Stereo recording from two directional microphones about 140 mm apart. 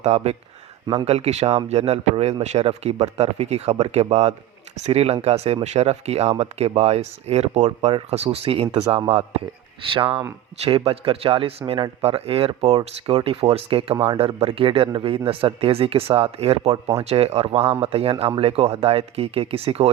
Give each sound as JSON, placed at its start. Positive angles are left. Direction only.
{"t": 0.0, "sound": "speech", "side_deg": -50}